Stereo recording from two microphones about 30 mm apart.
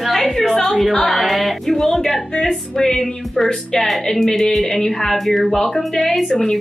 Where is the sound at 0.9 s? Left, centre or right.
Centre.